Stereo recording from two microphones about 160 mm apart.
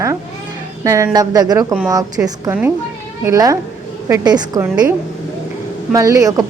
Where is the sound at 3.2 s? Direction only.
20° right (ahead or behind).